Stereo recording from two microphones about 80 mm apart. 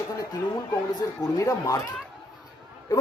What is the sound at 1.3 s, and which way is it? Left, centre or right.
Speech, left.